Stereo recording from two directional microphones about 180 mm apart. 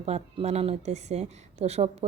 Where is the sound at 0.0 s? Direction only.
35° right (ahead or behind).